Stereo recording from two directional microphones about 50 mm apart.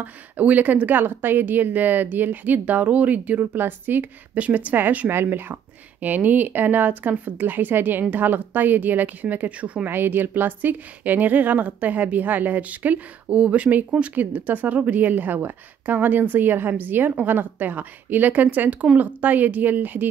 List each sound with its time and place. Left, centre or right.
0.0 s speech: right
3.5 s speech: right
4.4 s speech: right
5.9 s speech: right
9.8 s speech: right
14.1 s speech: right